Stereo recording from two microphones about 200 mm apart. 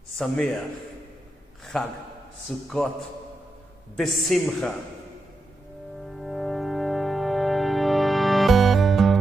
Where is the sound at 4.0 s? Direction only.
Centre (ahead or behind).